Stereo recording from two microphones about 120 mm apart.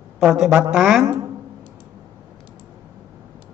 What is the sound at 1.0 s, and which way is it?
Speech, 25° right (ahead or behind).